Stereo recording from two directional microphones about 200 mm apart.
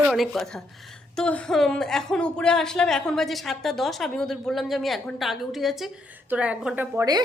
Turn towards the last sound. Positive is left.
turn(degrees=-20)  # may be behind; listen again after turning